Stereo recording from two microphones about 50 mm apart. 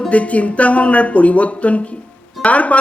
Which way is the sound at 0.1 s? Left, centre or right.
Left.